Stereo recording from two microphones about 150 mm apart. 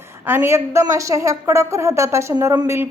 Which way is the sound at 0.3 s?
15° right (ahead or behind).